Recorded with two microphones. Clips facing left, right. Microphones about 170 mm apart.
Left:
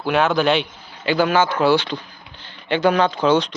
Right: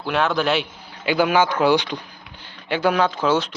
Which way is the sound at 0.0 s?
Centre (ahead or behind).